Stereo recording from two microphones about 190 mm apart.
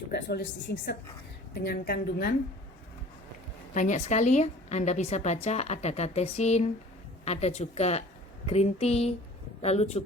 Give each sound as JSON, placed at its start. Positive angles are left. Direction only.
{"t": 0.1, "sound": "a woman's voice", "side_deg": 60}
{"t": 3.8, "sound": "a woman's voice", "side_deg": 40}